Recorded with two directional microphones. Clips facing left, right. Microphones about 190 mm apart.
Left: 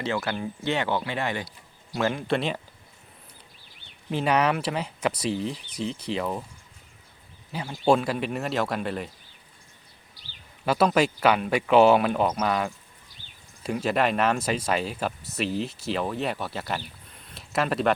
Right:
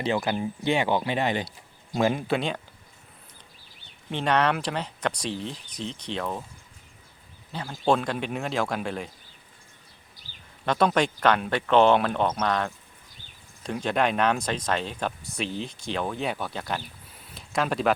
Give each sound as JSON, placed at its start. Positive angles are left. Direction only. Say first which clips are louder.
{"t": 0.0, "sound": "speech", "louder": "right 2 dB", "side_deg": -15}
{"t": 2.2, "sound": "speech", "louder": "left 1 dB", "side_deg": 0}
{"t": 4.1, "sound": "speech", "louder": "left 1 dB", "side_deg": 5}
{"t": 7.5, "sound": "speech", "louder": "left 2 dB", "side_deg": 5}
{"t": 10.7, "sound": "speech", "louder": "left 1 dB", "side_deg": 5}